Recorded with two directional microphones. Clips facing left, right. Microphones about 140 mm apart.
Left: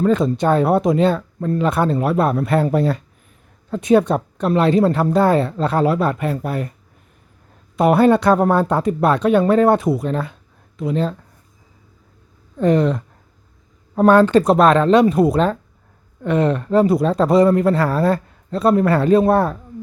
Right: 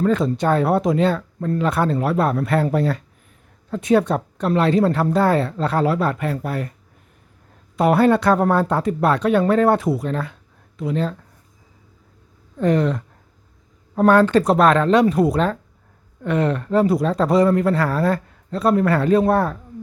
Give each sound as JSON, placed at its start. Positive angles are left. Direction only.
{"t": 0.0, "sound": "speech", "side_deg": 20}
{"t": 7.8, "sound": "speech", "side_deg": 20}
{"t": 12.5, "sound": "speech", "side_deg": 25}